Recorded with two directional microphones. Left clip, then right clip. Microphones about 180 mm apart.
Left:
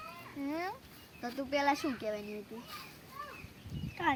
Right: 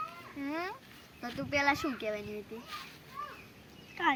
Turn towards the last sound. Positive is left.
turn(degrees=5)  # may be behind; listen again after turning